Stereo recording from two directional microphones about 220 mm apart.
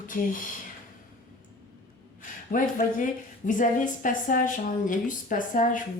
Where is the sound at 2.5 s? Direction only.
35° left (ahead or behind).